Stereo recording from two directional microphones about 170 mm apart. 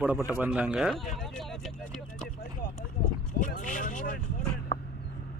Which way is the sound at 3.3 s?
50° left (ahead or behind).